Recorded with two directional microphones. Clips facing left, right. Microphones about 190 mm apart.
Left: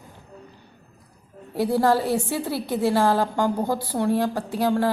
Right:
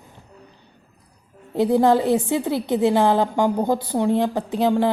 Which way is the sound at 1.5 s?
20° right (ahead or behind).